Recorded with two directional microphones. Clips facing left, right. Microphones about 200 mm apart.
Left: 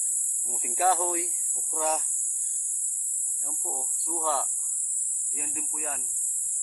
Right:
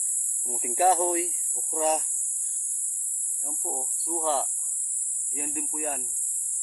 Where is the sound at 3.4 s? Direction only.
20° right (ahead or behind).